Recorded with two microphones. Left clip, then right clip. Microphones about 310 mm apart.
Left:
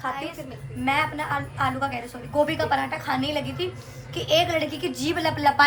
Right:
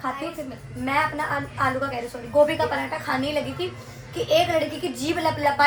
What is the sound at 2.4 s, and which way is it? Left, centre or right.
A woman's voice, centre.